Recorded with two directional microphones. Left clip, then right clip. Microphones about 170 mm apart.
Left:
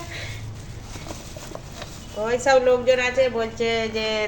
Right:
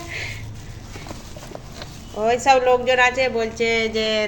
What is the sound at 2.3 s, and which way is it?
Speech, 55° right (ahead or behind).